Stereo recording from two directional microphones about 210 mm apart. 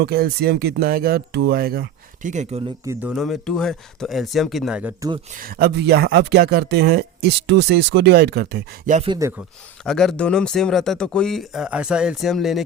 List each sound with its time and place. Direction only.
0.0 s speech: 50° right (ahead or behind); by 2.6 s 30° right (ahead or behind)
2.8 s speech: 10° right (ahead or behind)
3.1 s speech: centre (ahead or behind)
5.3 s speech: 45° right (ahead or behind)
9.2 s speech: 15° right (ahead or behind)
9.8 s speech: centre (ahead or behind)